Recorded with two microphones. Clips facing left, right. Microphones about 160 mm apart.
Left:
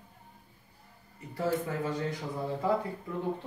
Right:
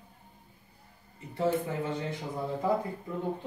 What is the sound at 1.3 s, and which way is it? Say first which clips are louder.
Speech: right 2 dB; 25° right (ahead or behind).